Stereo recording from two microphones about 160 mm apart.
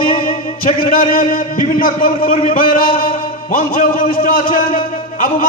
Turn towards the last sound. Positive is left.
turn(degrees=60)  # may be behind; listen again after turning